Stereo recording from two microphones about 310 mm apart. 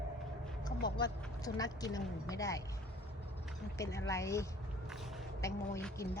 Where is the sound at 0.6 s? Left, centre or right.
Centre.